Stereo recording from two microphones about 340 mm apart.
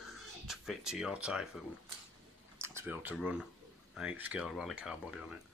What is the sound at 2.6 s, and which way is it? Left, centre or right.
Speech, centre.